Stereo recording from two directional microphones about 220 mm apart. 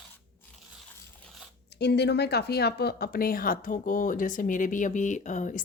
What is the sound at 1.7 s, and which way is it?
Speech, 50° left (ahead or behind).